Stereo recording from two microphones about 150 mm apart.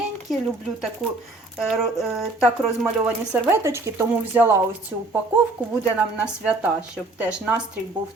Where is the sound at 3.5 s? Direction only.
15° right (ahead or behind).